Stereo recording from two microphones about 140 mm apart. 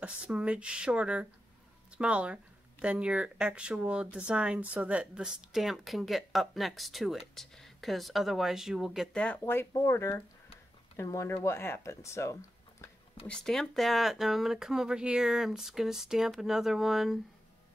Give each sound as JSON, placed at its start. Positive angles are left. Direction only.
{"t": 0.0, "sound": "speech", "side_deg": -10}
{"t": 9.2, "sound": "speech", "side_deg": 15}
{"t": 13.3, "sound": "speech", "side_deg": 5}